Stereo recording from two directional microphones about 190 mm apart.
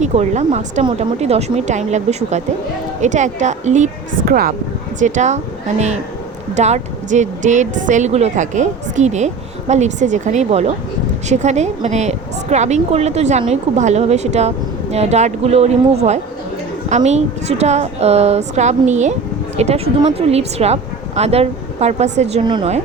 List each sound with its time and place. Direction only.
0.0 s a woman's voice: 35° right (ahead or behind)
4.3 s a woman's voice: 50° right (ahead or behind); by 22.7 s 30° right (ahead or behind)